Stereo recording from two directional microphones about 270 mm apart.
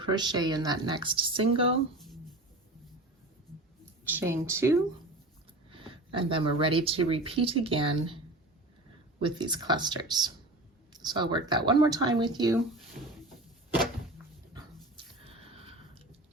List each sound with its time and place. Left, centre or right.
0.0 s speech: centre
4.0 s speech: centre
9.2 s speech: centre
14.9 s a sound: right